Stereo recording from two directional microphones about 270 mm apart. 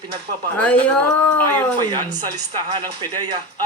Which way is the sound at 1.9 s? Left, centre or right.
Centre.